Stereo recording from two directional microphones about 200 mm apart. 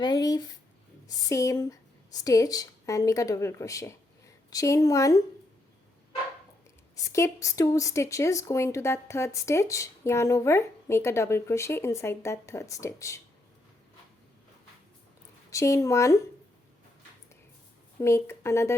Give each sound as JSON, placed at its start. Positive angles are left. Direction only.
{"t": 0.0, "sound": "speech", "side_deg": 20}
{"t": 6.9, "sound": "speech", "side_deg": 15}
{"t": 15.4, "sound": "speech", "side_deg": 15}
{"t": 18.0, "sound": "speech", "side_deg": 15}